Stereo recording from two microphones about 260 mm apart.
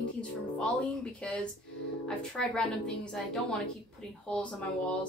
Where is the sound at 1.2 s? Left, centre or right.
Centre.